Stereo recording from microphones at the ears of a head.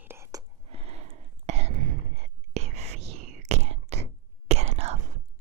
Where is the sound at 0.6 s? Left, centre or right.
Right.